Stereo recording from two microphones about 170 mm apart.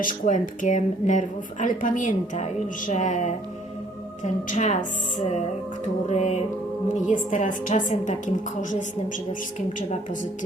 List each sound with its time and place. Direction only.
0.0 s speech: 50° left (ahead or behind)
6.1 s music: 40° left (ahead or behind)
6.9 s speech: 50° left (ahead or behind)
9.7 s speech: 50° left (ahead or behind)